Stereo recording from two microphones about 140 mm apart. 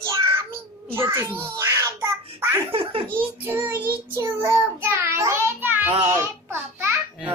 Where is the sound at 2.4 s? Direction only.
20° right (ahead or behind).